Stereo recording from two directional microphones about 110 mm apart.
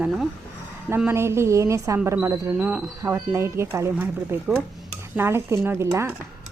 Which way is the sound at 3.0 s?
25° right (ahead or behind).